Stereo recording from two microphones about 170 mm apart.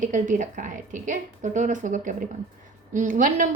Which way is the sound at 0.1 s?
50° right (ahead or behind).